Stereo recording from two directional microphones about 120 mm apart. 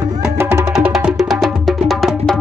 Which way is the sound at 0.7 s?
5° right (ahead or behind).